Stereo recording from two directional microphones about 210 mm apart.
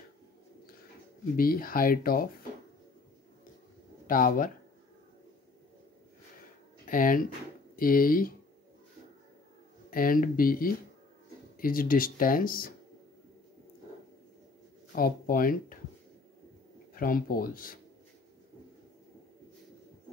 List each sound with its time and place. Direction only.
1.3 s speech: 45° left (ahead or behind)
4.1 s speech: 40° left (ahead or behind)
6.9 s speech: 40° left (ahead or behind)
9.8 s speech: 40° left (ahead or behind)
14.9 s speech: 45° left (ahead or behind)
16.9 s speech: 40° left (ahead or behind)